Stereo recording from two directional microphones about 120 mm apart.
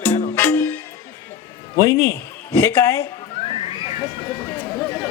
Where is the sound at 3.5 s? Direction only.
50° left (ahead or behind).